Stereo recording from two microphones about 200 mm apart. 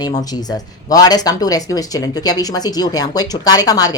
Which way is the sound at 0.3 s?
20° left (ahead or behind).